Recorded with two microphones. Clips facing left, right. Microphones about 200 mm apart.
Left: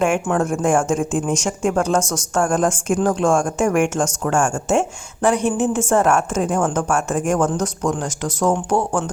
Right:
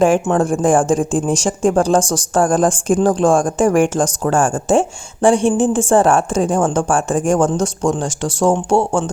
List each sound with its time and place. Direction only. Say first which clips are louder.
0.0 s speech: right 5 dB; 30° right (ahead or behind)